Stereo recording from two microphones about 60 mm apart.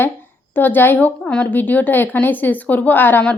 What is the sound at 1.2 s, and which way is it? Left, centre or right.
Speech, centre.